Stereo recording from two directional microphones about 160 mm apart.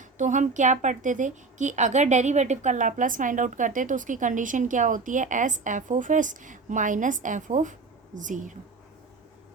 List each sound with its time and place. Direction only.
0.0 s a woman's voice: 50° right (ahead or behind)